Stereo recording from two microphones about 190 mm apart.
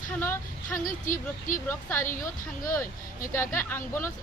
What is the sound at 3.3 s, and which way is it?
Speech, 10° left (ahead or behind).